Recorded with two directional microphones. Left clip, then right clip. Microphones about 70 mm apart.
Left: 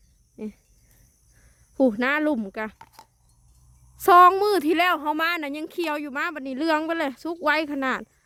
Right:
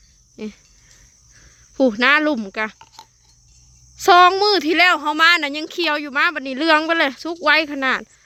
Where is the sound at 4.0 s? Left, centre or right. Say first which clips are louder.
Right 3 dB; left.